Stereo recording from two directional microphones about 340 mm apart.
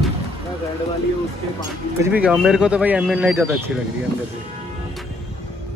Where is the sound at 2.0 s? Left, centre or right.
Centre.